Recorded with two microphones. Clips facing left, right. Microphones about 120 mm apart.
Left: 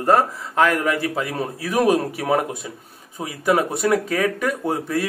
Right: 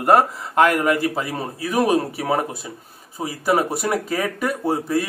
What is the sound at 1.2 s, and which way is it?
A man's voice, centre (ahead or behind).